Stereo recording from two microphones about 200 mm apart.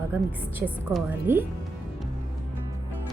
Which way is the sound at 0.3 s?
10° right (ahead or behind).